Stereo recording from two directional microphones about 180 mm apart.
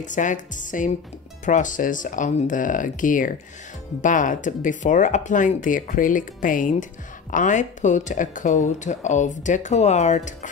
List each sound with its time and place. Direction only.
0.0 s speech: 45° left (ahead or behind)